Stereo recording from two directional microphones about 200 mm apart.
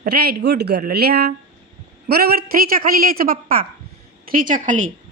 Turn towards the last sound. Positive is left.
turn(degrees=-40)  # may be behind; listen again after turning